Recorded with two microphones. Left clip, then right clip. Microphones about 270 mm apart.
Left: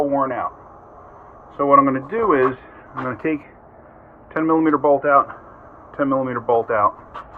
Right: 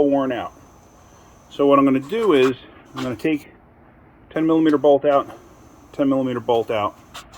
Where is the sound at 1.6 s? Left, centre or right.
Right.